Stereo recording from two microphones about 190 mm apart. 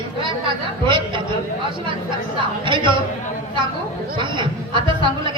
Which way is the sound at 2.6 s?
25° right (ahead or behind).